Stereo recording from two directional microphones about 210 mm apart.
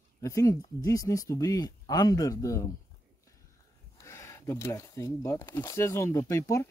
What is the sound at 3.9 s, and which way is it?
Speech, 15° left (ahead or behind).